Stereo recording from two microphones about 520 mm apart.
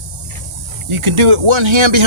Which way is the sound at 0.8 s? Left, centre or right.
Right.